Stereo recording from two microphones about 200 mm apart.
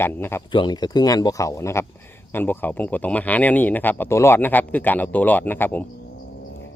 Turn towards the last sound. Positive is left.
turn(degrees=10)  # may be behind; listen again after turning